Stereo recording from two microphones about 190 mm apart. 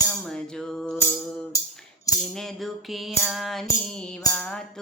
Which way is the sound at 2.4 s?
Centre (ahead or behind).